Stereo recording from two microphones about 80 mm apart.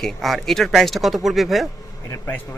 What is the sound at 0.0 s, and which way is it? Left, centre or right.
Speech, centre.